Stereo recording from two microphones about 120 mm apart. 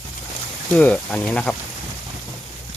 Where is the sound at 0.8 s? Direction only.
10° left (ahead or behind).